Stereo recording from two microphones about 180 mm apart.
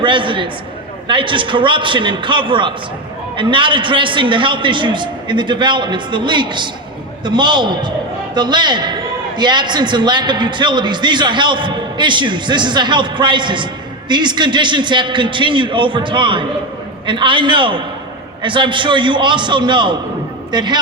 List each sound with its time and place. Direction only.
0.0 s a man's voice: 25° right (ahead or behind)